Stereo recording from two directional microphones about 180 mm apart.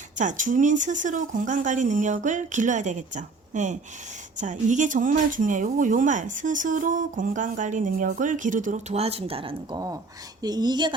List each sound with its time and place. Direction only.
0.2 s speech: 45° right (ahead or behind); by 10.9 s 25° right (ahead or behind)